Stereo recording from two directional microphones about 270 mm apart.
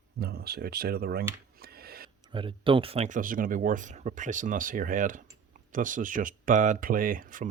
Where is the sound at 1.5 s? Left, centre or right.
Right.